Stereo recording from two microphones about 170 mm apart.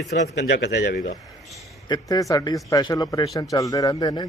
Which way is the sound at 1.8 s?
20° left (ahead or behind).